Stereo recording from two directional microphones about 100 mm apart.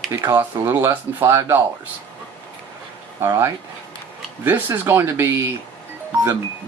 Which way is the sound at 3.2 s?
25° right (ahead or behind).